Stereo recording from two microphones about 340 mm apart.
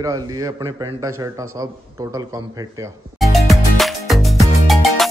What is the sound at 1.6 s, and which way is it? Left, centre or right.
Music, centre.